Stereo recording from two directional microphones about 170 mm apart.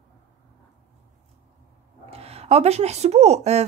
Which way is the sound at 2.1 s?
35° right (ahead or behind).